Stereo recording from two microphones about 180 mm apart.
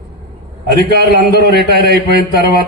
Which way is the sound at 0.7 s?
65° right (ahead or behind).